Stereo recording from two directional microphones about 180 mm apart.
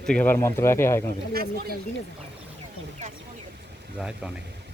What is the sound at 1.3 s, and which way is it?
Speech, 55° right (ahead or behind).